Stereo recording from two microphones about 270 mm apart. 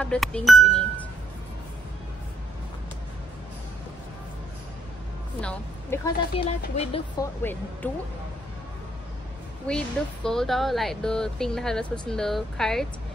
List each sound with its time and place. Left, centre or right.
0.0 s speech: centre
5.4 s a woman's voice: centre
6.4 s speech: centre
7.8 s speech: centre
9.7 s speech: centre